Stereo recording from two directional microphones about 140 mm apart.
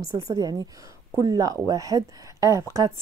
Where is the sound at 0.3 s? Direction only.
30° right (ahead or behind).